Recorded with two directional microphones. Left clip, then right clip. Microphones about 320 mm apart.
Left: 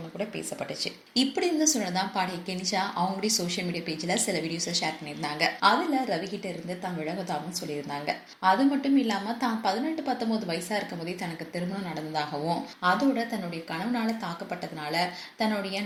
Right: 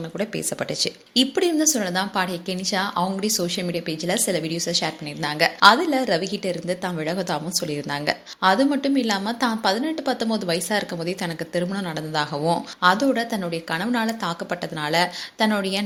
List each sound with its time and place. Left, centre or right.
0.2 s a woman's voice: right